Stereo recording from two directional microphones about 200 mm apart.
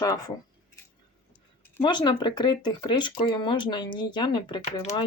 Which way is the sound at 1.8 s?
25° left (ahead or behind).